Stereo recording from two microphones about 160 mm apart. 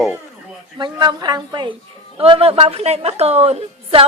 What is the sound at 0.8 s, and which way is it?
A woman's voice, 25° right (ahead or behind).